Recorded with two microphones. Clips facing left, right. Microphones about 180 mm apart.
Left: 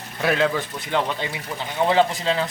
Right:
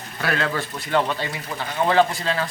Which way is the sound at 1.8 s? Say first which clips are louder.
Even; 15° left (ahead or behind).